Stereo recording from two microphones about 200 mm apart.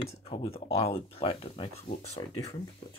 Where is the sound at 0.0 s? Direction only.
30° left (ahead or behind).